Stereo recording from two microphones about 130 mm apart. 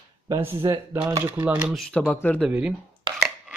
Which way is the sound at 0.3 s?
20° right (ahead or behind).